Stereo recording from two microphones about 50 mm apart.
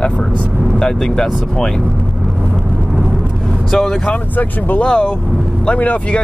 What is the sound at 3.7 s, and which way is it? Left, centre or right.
Speech, centre.